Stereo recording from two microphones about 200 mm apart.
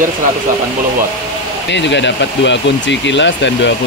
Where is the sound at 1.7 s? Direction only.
60° left (ahead or behind).